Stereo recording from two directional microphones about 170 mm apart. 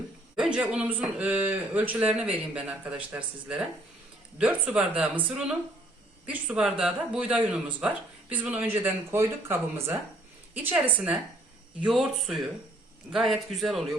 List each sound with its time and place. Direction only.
0.3 s speech: 5° right (ahead or behind)